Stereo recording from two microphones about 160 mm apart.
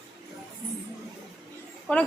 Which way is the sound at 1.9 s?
5° left (ahead or behind).